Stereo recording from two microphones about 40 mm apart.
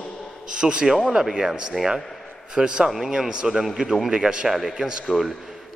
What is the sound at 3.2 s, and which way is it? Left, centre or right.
A man's voice, centre.